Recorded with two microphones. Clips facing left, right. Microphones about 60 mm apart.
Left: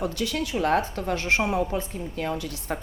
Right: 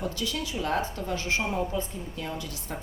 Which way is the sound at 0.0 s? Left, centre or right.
Left.